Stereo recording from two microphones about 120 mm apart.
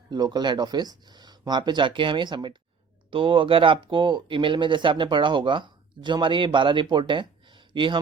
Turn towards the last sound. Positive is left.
turn(degrees=-45)  # may be behind; listen again after turning